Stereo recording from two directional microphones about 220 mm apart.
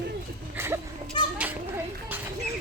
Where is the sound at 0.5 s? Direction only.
10° right (ahead or behind).